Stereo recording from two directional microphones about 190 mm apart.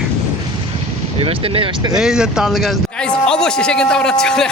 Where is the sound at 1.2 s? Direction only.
30° right (ahead or behind).